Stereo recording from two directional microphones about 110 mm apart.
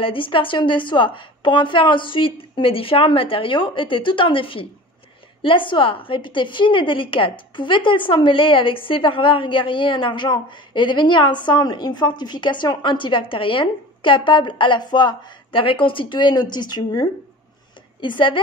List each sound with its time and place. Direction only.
0.0 s a woman's voice: 50° left (ahead or behind)